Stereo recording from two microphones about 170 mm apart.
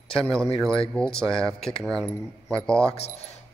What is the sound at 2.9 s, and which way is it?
Speech, 35° left (ahead or behind).